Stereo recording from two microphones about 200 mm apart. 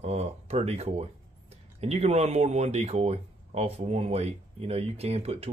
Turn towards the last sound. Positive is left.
turn(degrees=-30)  # may be behind; listen again after turning